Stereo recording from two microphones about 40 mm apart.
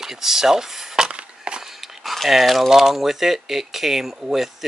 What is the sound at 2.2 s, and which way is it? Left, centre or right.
Speech, centre.